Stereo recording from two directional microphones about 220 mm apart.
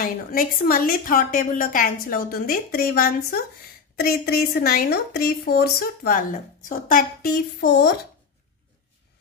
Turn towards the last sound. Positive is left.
turn(degrees=50)  # may be behind; listen again after turning